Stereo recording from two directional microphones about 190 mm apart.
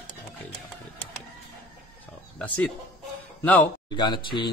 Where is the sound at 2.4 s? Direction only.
5° left (ahead or behind).